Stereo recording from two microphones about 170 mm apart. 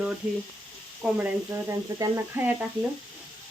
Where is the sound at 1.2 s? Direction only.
15° right (ahead or behind).